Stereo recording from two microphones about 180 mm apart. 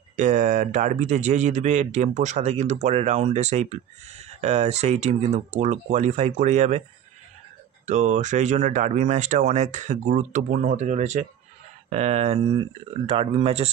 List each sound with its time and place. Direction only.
0.1 s speech: 45° right (ahead or behind)
7.8 s speech: 40° right (ahead or behind)